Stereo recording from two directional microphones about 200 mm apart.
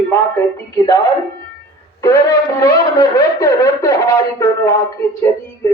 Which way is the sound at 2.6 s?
20° left (ahead or behind).